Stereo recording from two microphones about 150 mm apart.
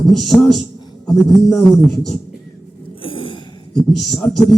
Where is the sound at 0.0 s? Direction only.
Centre (ahead or behind).